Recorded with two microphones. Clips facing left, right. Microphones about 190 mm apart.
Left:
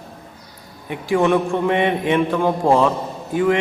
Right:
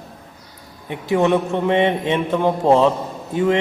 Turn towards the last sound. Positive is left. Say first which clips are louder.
# left 1 dB
turn(degrees=-25)  # may be behind; listen again after turning